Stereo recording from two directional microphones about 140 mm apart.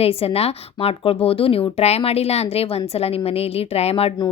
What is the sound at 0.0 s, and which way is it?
Speech, 45° left (ahead or behind).